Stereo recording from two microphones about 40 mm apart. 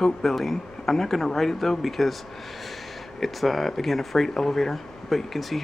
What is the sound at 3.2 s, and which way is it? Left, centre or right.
Speech, centre.